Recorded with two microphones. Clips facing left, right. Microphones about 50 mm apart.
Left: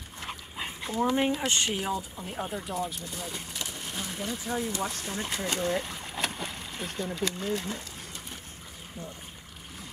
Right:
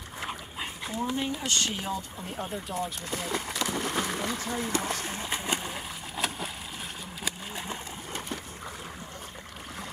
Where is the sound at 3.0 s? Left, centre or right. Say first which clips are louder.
Right 6 dB; right.